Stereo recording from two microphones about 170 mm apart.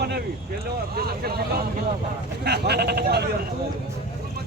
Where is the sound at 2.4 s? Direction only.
75° right (ahead or behind).